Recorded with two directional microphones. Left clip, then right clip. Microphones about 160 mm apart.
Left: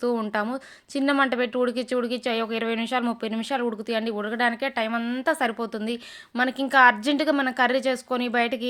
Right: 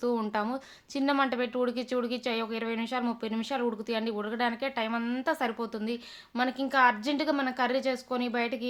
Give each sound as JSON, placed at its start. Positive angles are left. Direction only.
{"t": 0.0, "sound": "speech", "side_deg": 30}